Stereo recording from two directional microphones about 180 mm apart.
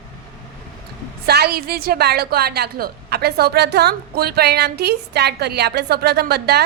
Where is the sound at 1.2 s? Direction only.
60° right (ahead or behind).